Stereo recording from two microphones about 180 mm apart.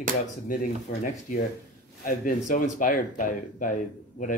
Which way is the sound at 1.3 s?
45° left (ahead or behind).